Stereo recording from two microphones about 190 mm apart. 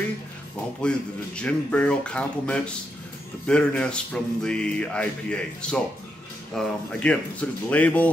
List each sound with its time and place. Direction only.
0.8 s music: 5° left (ahead or behind)
6.5 s speech: 5° left (ahead or behind)